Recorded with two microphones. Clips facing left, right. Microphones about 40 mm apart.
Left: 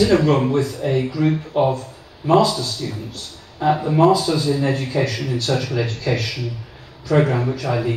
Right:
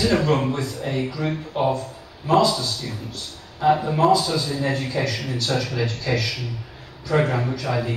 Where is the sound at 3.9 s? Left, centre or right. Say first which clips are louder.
Left 3 dB; centre.